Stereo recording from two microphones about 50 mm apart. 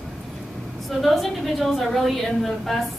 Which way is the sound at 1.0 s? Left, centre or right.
Centre.